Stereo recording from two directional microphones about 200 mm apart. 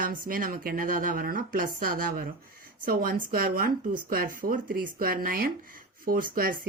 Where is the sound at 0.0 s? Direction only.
45° right (ahead or behind).